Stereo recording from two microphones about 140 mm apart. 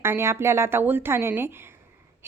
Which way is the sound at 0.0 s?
20° right (ahead or behind).